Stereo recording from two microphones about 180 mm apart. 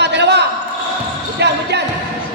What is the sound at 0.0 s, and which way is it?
Basketball bounce, 70° right (ahead or behind).